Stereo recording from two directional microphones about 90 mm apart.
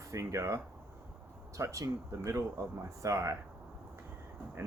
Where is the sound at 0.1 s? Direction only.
35° right (ahead or behind).